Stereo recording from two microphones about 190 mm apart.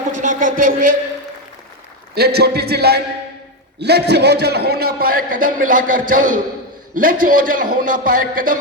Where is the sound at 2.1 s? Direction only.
55° right (ahead or behind).